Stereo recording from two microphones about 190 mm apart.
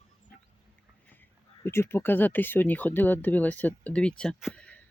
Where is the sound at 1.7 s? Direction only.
15° left (ahead or behind).